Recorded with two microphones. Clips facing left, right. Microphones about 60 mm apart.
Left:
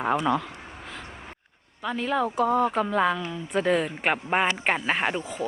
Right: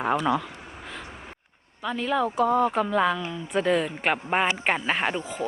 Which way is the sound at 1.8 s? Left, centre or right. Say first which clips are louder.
Right 1 dB; centre.